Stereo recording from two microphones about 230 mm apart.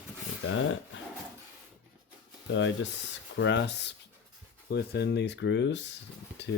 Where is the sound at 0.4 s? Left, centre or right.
Left.